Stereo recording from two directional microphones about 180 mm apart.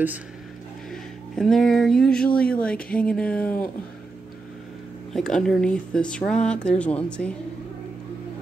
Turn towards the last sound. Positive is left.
turn(degrees=5)  # may be behind; listen again after turning